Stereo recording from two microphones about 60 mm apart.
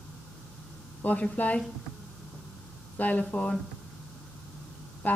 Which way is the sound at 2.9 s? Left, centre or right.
Left.